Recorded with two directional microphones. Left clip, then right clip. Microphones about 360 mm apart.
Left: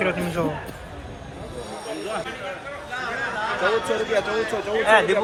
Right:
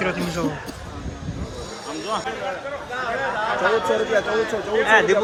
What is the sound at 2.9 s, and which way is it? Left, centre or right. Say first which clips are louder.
Chatter: right 3 dB; right.